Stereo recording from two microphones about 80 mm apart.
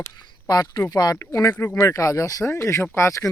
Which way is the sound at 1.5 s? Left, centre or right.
Left.